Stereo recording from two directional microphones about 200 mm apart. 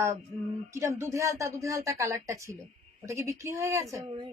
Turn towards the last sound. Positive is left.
turn(degrees=-20)  # may be behind; listen again after turning